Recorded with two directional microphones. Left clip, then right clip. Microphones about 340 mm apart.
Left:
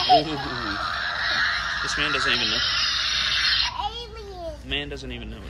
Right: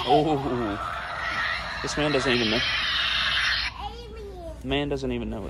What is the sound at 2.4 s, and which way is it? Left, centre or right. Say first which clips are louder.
Speech: left 2 dB; right.